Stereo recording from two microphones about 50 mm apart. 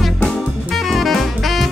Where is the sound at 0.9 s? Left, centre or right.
Centre.